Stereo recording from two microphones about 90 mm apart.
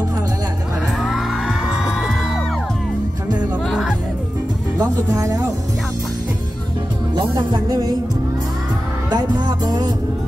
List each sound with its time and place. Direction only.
1.0 s music: 5° right (ahead or behind)
3.6 s music: centre (ahead or behind)
4.7 s speech: 40° right (ahead or behind)
7.2 s speech: 45° right (ahead or behind)
9.1 s music: 50° right (ahead or behind)